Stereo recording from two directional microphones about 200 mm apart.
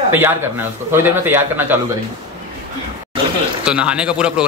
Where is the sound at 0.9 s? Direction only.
10° right (ahead or behind).